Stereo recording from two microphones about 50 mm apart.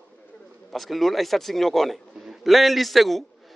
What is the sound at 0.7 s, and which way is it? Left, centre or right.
A man's voice, centre.